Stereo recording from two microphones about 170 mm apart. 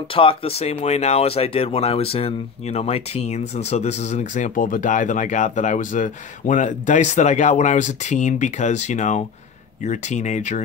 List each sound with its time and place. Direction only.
0.1 s speech: 30° left (ahead or behind)